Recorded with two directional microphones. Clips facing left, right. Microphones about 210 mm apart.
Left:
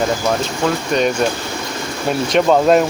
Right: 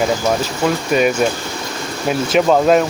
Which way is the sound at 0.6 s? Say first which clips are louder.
Right 2 dB; 5° right (ahead or behind).